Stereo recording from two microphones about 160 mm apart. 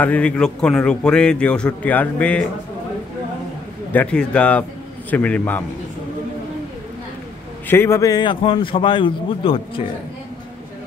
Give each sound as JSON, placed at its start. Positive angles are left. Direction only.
{"t": 0.0, "sound": "a man's voice", "side_deg": 10}
{"t": 3.9, "sound": "a man's voice", "side_deg": 10}
{"t": 7.6, "sound": "a man's voice", "side_deg": 15}